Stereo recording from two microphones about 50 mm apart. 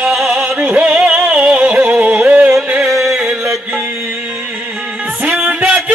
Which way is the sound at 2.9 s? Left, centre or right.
Centre.